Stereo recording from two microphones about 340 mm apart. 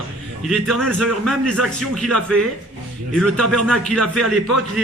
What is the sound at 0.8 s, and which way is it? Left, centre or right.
A man's voice, centre.